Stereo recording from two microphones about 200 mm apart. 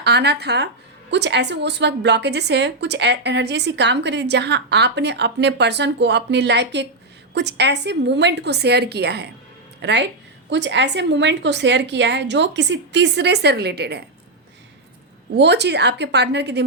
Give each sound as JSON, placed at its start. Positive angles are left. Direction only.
{"t": 0.0, "sound": "a woman's voice", "side_deg": -55}
{"t": 15.4, "sound": "a woman's voice", "side_deg": -55}